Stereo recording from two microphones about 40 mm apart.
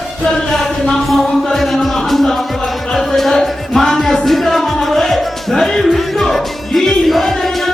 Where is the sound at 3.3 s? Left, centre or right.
Centre.